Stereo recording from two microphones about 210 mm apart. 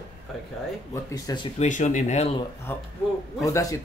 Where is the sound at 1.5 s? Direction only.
35° left (ahead or behind).